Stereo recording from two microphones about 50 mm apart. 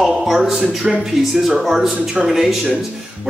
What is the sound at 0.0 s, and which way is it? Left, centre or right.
A man's voice, centre.